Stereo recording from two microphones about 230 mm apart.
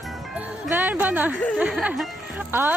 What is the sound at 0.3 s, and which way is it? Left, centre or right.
Speech, centre.